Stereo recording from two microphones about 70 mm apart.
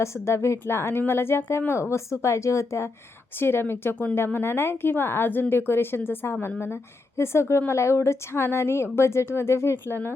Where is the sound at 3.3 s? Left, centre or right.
Left.